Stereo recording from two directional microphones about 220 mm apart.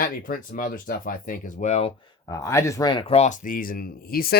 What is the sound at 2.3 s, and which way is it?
Speech, 15° left (ahead or behind).